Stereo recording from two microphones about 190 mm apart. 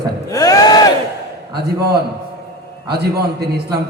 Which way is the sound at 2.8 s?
55° right (ahead or behind).